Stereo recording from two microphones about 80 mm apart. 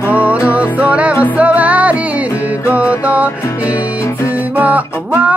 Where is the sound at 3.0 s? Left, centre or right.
Centre.